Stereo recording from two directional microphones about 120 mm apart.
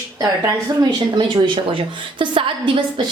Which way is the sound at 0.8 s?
35° right (ahead or behind).